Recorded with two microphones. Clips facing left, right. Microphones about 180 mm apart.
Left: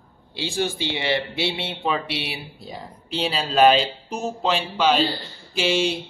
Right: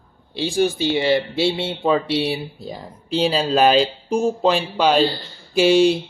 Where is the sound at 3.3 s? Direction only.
35° right (ahead or behind).